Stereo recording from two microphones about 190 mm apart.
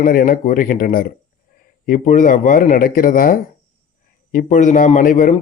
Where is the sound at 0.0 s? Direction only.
50° left (ahead or behind).